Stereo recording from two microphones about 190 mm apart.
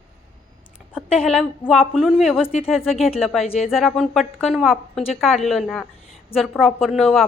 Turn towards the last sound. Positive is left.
turn(degrees=0)  # may be behind; listen again after turning